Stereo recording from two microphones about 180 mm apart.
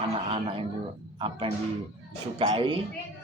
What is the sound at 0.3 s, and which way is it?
A man's voice, 30° right (ahead or behind).